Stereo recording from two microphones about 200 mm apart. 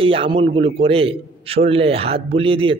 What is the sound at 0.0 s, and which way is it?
A man's voice, 25° right (ahead or behind).